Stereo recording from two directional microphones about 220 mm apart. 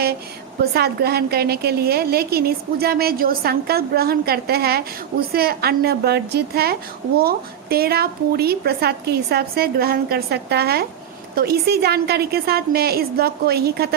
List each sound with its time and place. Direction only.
0.6 s a woman's voice: 45° right (ahead or behind)